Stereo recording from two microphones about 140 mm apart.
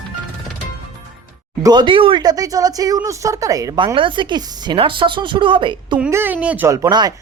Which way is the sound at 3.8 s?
35° right (ahead or behind).